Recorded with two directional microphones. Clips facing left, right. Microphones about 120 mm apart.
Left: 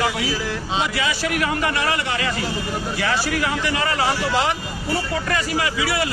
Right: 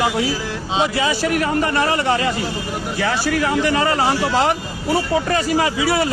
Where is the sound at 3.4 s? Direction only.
35° right (ahead or behind).